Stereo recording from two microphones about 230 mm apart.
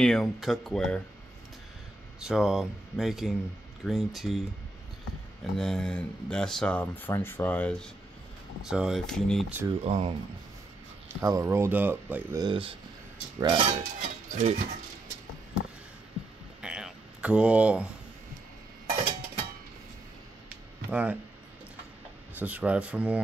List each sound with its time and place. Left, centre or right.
0.0 s speech: centre
2.1 s speech: centre
5.6 s speech: centre
9.8 s speech: right
11.2 s speech: centre; by 14.6 s right
16.6 s a sound: centre
18.9 s a sound: right
20.4 s a sound: centre
22.4 s speech: centre